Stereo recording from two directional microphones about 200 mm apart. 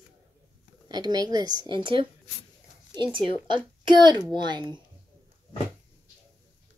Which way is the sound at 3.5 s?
20° right (ahead or behind).